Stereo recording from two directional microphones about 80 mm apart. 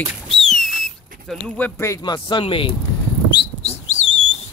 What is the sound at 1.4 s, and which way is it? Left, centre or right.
Speech, centre.